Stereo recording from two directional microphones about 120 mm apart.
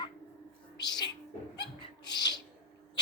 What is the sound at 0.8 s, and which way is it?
Music, 35° left (ahead or behind).